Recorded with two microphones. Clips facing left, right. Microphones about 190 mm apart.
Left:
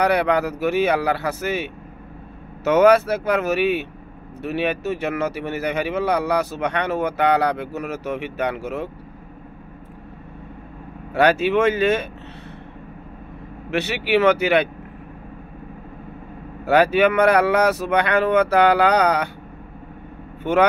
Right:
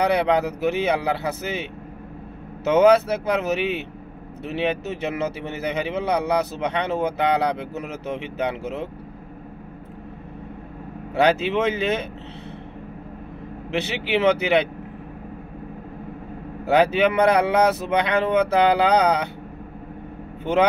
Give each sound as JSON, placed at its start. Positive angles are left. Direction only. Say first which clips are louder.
{"t": 0.0, "sound": "speech", "louder": "left 1 dB", "side_deg": -20}
{"t": 2.8, "sound": "speech", "louder": "left 1 dB", "side_deg": -20}
{"t": 11.1, "sound": "speech", "louder": "left 2 dB", "side_deg": -20}
{"t": 13.7, "sound": "speech", "louder": "left 3 dB", "side_deg": -20}
{"t": 16.6, "sound": "speech", "louder": "left 2 dB", "side_deg": -20}